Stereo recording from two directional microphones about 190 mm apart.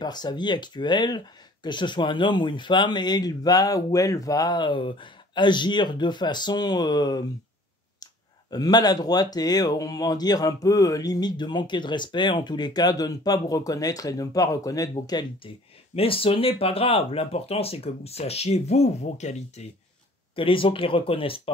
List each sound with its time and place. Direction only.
0.0 s speech: 20° left (ahead or behind)